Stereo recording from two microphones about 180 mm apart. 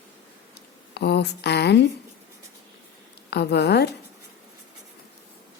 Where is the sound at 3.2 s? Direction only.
65° left (ahead or behind).